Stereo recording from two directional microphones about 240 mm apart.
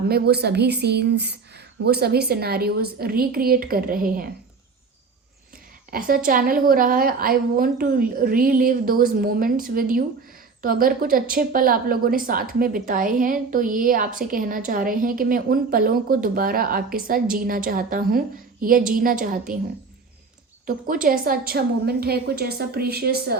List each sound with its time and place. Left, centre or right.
0.1 s a woman's voice: right
5.9 s a woman's voice: right
20.7 s a woman's voice: right